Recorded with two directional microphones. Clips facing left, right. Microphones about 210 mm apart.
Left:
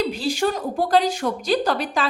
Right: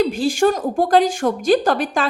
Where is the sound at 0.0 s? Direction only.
50° right (ahead or behind).